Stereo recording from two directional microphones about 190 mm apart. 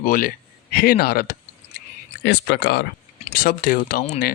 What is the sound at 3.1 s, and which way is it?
Speech, 45° left (ahead or behind).